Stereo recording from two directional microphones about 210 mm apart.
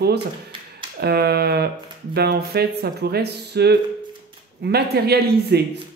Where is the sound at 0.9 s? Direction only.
50° right (ahead or behind).